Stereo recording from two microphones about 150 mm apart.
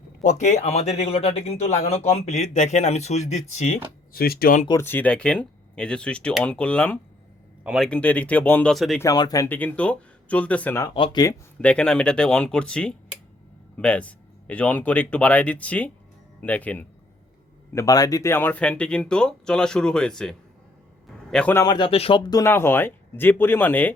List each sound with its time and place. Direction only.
0.2 s speech: 55° left (ahead or behind)
4.1 s speech: 90° left
4.7 s speech: 15° left (ahead or behind)
7.6 s speech: 5° right (ahead or behind)
7.9 s speech: 10° left (ahead or behind)
9.0 s speech: 25° left (ahead or behind)
9.5 s speech: 10° left (ahead or behind)
10.8 s speech: 30° left (ahead or behind)
11.6 s speech: 5° left (ahead or behind)
17.7 s a man's voice: 25° left (ahead or behind); by 21.5 s 5° left (ahead or behind)
21.5 s a man's voice: 25° left (ahead or behind)
22.3 s speech: 20° left (ahead or behind)